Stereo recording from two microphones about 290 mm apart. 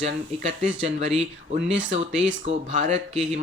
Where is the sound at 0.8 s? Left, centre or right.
Right.